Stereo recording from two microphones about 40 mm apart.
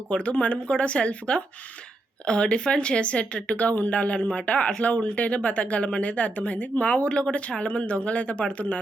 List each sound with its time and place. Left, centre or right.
0.1 s speech: left